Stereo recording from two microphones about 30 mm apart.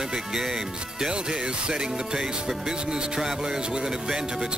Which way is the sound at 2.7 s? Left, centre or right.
Right.